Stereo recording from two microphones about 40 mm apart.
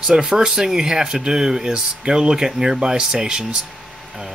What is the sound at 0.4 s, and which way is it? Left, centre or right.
Speech, right.